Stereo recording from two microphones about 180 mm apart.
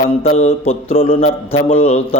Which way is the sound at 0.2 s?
35° left (ahead or behind).